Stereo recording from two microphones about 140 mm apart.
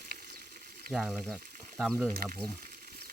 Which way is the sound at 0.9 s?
Centre (ahead or behind).